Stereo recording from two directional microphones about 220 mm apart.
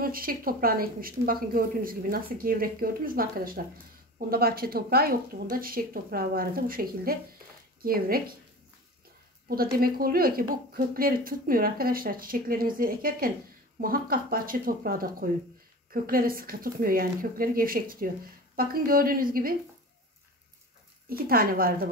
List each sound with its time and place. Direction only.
0.0 s speech: 40° right (ahead or behind)
9.5 s speech: 40° right (ahead or behind)
21.1 s speech: 40° right (ahead or behind)